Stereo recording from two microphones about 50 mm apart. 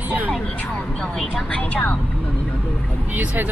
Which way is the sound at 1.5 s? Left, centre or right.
Left.